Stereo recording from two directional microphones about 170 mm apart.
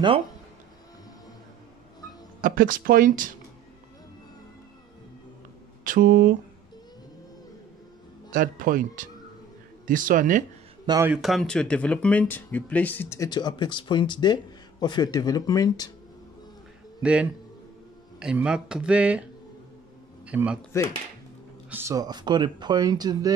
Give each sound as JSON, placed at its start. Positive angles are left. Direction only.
{"t": 2.4, "sound": "speech", "side_deg": -55}
{"t": 5.9, "sound": "speech", "side_deg": -55}
{"t": 8.3, "sound": "speech", "side_deg": -55}
{"t": 11.1, "sound": "speech", "side_deg": 0}
{"t": 17.0, "sound": "speech", "side_deg": -5}
{"t": 20.2, "sound": "speech", "side_deg": -5}
{"t": 20.7, "sound": "speech", "side_deg": 15}
{"t": 21.6, "sound": "speech", "side_deg": -15}